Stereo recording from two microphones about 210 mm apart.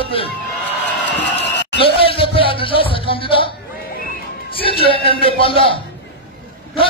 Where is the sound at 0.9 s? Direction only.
55° left (ahead or behind).